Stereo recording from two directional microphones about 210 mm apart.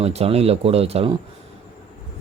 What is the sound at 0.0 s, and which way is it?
Speech, 30° right (ahead or behind).